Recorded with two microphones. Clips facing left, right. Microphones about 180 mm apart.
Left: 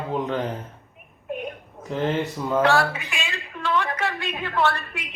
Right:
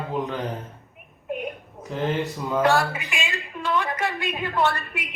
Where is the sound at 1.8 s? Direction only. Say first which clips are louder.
Left 1 dB; centre (ahead or behind).